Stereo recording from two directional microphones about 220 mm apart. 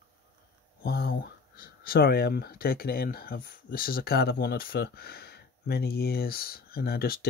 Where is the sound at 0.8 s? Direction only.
45° left (ahead or behind).